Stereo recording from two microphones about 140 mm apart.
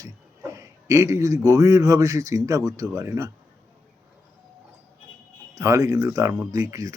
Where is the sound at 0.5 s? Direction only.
20° right (ahead or behind).